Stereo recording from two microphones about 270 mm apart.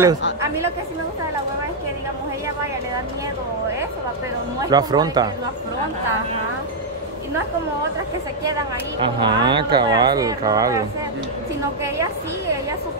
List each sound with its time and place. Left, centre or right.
4.6 s speech: centre
9.0 s speech: centre